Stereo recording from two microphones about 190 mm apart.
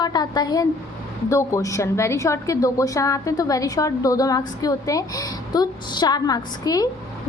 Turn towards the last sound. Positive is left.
turn(degrees=20)  # may be behind; listen again after turning